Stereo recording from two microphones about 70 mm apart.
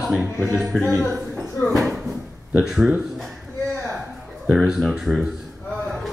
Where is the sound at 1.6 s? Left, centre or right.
Centre.